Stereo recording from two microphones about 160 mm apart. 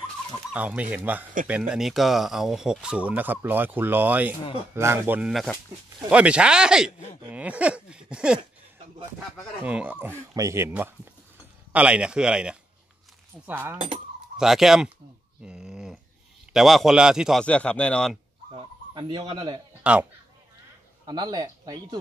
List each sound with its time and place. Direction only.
0.5 s a man's voice: 5° right (ahead or behind)
9.6 s a man's voice: 10° right (ahead or behind)
14.3 s speech: centre (ahead or behind)
15.4 s a sound: 5° right (ahead or behind)
16.5 s a man's voice: centre (ahead or behind)
18.5 s chicken: 30° right (ahead or behind)
19.8 s speech: 5° right (ahead or behind)
21.0 s speech: 25° right (ahead or behind)